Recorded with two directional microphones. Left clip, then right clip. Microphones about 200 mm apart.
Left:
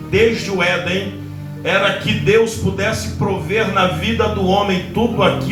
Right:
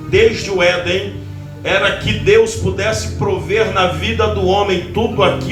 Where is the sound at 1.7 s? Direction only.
25° right (ahead or behind).